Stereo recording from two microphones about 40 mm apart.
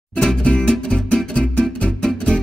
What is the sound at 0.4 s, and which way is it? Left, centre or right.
Music, left.